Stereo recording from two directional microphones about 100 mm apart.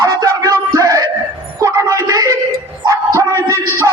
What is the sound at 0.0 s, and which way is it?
Music, 35° right (ahead or behind).